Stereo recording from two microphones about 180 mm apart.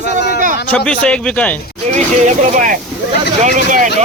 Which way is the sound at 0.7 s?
5° left (ahead or behind).